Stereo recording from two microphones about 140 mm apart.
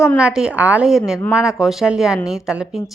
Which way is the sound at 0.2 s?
5° right (ahead or behind).